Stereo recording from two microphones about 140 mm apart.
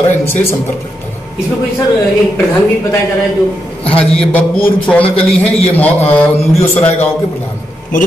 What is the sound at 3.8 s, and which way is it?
A man's voice, 5° left (ahead or behind).